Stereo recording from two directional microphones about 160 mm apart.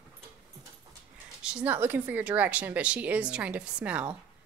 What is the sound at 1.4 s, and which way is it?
Speech, 5° right (ahead or behind).